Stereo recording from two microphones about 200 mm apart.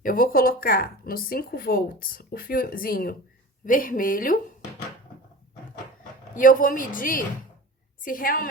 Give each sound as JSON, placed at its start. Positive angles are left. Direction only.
{"t": 0.0, "sound": "speech", "side_deg": 45}
{"t": 6.3, "sound": "speech", "side_deg": 45}